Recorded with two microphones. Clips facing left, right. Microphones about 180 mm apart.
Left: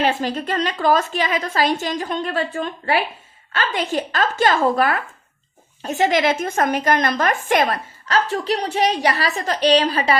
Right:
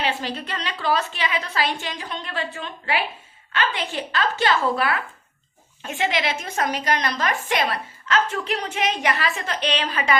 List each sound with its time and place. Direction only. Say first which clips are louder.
0.0 s a woman's voice: left 6 dB; 45° left (ahead or behind)